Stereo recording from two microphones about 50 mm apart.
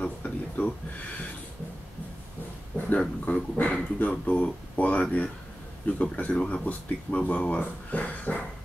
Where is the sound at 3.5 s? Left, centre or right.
Left.